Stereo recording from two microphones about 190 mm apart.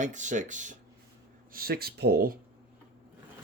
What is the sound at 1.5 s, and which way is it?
Speech, 50° right (ahead or behind).